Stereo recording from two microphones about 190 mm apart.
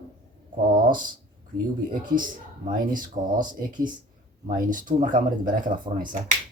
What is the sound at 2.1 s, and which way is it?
Speech, 45° right (ahead or behind).